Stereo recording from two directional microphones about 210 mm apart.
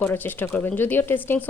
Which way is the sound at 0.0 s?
10° left (ahead or behind).